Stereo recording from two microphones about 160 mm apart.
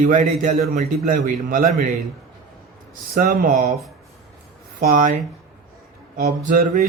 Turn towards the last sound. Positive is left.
turn(degrees=-55)  # may be behind; listen again after turning